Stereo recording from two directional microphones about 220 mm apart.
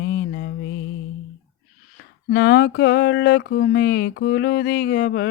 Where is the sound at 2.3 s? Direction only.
45° left (ahead or behind).